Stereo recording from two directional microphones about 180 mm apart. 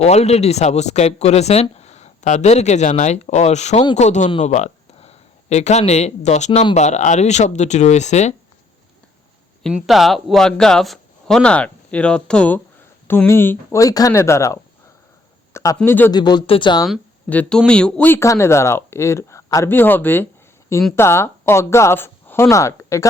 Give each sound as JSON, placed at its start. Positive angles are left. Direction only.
{"t": 0.0, "sound": "speech", "side_deg": 35}
{"t": 9.6, "sound": "speech", "side_deg": 0}
{"t": 16.2, "sound": "speech", "side_deg": 25}
{"t": 17.2, "sound": "speech", "side_deg": 10}